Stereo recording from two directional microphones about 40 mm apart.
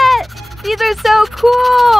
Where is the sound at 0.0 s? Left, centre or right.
Centre.